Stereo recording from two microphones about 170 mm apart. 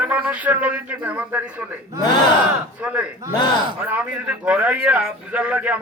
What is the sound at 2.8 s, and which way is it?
A man's voice, 5° right (ahead or behind).